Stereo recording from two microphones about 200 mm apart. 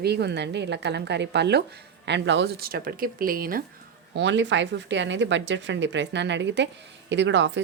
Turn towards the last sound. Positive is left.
turn(degrees=-65)  # may be behind; listen again after turning